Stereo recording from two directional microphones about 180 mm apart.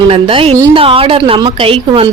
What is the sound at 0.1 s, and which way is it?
A woman's voice, 30° right (ahead or behind).